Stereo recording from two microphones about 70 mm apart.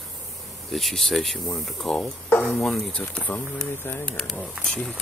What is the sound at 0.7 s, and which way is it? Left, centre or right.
Speech, centre.